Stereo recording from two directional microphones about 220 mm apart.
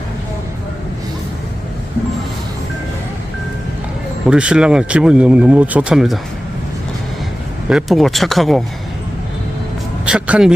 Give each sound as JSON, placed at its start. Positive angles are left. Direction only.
{"t": 4.3, "sound": "speech", "side_deg": -5}
{"t": 7.7, "sound": "speech", "side_deg": 0}
{"t": 10.1, "sound": "speech", "side_deg": -5}